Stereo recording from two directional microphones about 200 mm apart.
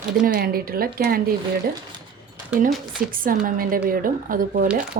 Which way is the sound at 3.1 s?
45° right (ahead or behind).